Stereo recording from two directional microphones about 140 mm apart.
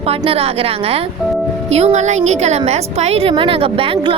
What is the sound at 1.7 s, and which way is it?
A woman's voice, 55° right (ahead or behind).